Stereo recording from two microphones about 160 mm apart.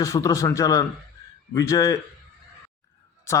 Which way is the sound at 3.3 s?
15° left (ahead or behind).